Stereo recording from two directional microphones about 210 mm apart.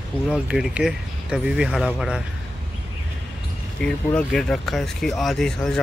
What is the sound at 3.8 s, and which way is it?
Speech, 5° left (ahead or behind).